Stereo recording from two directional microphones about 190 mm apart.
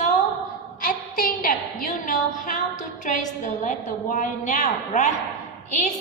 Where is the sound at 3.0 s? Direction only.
40° left (ahead or behind).